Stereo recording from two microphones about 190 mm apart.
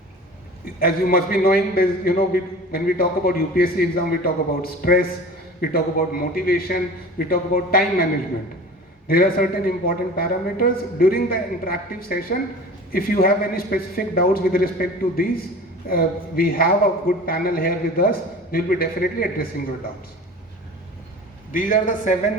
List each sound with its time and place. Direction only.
0.8 s a man's voice: 50° left (ahead or behind)
9.0 s a man's voice: 50° left (ahead or behind)
21.5 s a man's voice: 45° left (ahead or behind)